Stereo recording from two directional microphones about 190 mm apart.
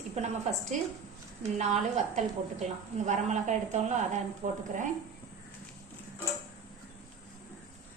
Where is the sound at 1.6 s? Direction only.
35° right (ahead or behind).